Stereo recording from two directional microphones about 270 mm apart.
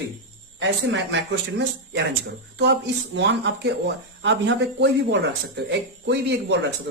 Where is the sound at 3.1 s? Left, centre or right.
Right.